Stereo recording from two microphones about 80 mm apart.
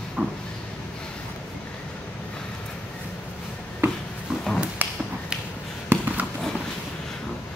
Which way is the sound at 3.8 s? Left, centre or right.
Right.